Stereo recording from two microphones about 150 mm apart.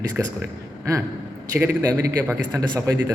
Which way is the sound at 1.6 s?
15° right (ahead or behind).